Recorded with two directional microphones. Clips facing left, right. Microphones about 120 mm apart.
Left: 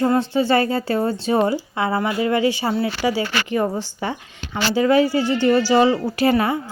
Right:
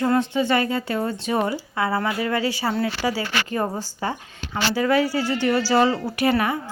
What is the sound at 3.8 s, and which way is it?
Speech, 40° right (ahead or behind).